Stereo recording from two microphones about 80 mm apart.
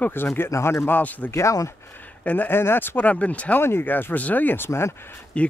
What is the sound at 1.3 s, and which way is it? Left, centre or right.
Speech, left.